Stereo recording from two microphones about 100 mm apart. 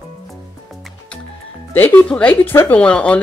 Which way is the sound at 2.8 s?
10° left (ahead or behind).